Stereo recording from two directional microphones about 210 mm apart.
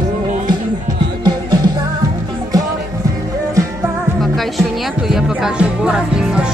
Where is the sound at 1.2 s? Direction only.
20° right (ahead or behind).